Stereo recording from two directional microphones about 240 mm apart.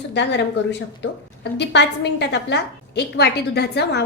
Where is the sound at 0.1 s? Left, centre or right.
Left.